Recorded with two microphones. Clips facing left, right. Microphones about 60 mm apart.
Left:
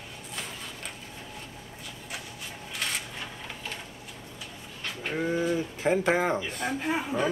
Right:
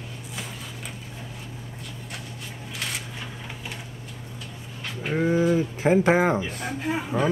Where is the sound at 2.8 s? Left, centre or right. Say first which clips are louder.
Even; centre.